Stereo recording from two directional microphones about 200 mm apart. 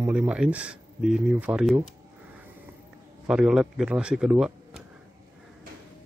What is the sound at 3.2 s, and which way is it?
A man's voice, 5° right (ahead or behind).